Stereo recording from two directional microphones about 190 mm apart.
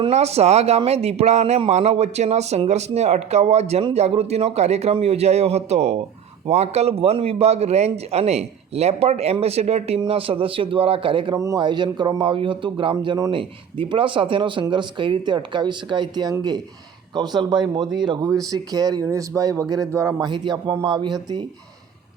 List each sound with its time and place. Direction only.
0.0 s a man's voice: 35° right (ahead or behind)